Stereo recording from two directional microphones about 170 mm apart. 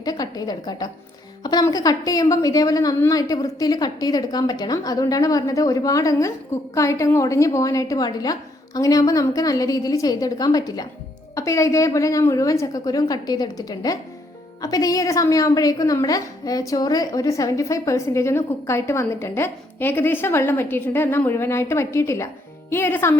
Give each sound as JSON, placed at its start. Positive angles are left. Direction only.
{"t": 0.0, "sound": "a woman's voice", "side_deg": 20}